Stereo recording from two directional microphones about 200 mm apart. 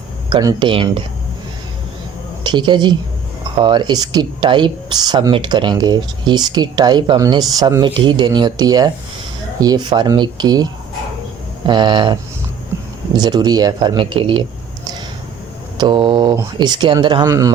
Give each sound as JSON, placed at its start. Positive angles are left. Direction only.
{"t": 0.3, "sound": "speech", "side_deg": -20}
{"t": 2.4, "sound": "a woman's voice", "side_deg": -20}
{"t": 13.1, "sound": "speech", "side_deg": -20}
{"t": 15.8, "sound": "a man's voice", "side_deg": -25}